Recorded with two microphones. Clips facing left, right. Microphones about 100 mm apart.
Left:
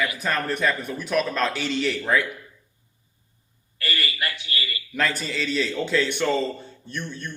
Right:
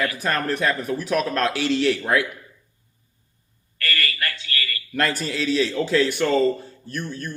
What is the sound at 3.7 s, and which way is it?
A man's voice, 20° left (ahead or behind).